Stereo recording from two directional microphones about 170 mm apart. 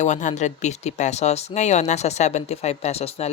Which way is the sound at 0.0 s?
45° left (ahead or behind).